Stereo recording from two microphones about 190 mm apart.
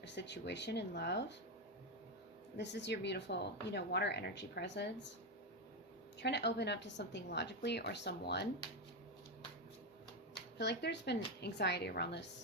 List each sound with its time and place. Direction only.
0.0 s a woman's voice: 65° left (ahead or behind)
2.6 s a woman's voice: 65° left (ahead or behind)
6.1 s a woman's voice: 65° left (ahead or behind)
10.6 s a woman's voice: 60° left (ahead or behind)